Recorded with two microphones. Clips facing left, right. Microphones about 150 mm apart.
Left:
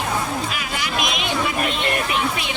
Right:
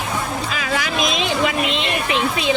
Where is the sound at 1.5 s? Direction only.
90° right.